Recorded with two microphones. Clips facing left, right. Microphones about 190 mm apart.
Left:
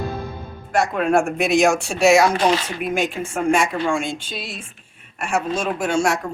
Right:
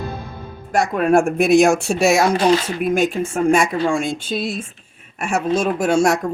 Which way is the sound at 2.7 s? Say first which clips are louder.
Right 5 dB; 45° right (ahead or behind).